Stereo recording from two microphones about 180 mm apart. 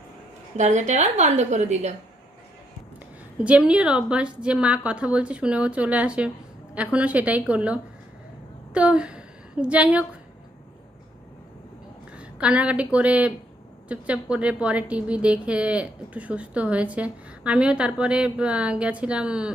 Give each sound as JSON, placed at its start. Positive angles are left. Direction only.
{"t": 0.5, "sound": "a woman's voice", "side_deg": -40}
{"t": 3.4, "sound": "a woman's voice", "side_deg": -5}
{"t": 12.1, "sound": "a woman's voice", "side_deg": -5}